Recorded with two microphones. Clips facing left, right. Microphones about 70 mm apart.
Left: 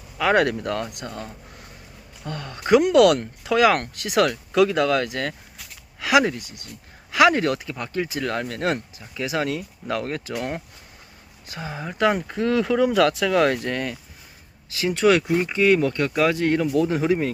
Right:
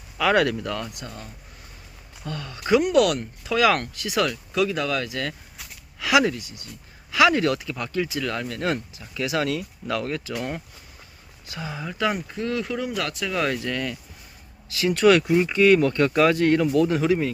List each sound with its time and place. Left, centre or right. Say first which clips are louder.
0.3 s speech: left 1 dB; left
0.9 s speech: left 5 dB; left
2.2 s speech: left 1 dB; left
2.8 s speech: left 4 dB; left
6.0 s speech: left 1 dB; left
9.1 s speech: even; left
11.4 s speech: left 1 dB; left
12.3 s speech: left 6 dB; left
13.4 s speech: left 4 dB; left
14.9 s speech: right 1 dB; centre
17.0 s speech: even; left